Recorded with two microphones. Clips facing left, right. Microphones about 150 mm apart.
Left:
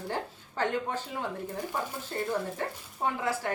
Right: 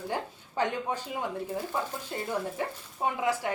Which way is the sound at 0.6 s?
15° right (ahead or behind).